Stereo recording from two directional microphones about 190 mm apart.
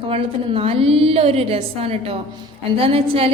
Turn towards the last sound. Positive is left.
turn(degrees=-30)  # may be behind; listen again after turning